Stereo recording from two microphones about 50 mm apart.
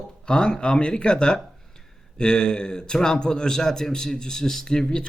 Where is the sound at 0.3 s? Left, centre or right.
Centre.